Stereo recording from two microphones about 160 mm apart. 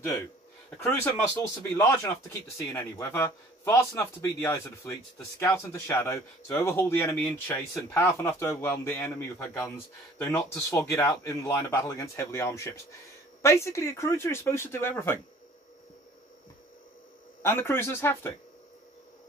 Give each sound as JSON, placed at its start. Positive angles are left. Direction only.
{"t": 0.7, "sound": "speech", "side_deg": 15}
{"t": 10.7, "sound": "speech", "side_deg": 20}
{"t": 17.4, "sound": "speech", "side_deg": 15}